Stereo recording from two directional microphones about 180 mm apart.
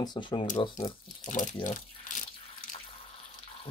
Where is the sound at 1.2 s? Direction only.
45° left (ahead or behind).